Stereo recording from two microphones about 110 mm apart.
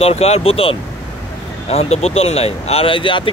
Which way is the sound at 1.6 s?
70° left (ahead or behind).